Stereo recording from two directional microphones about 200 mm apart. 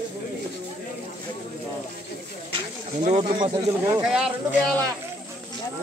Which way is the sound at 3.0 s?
30° right (ahead or behind).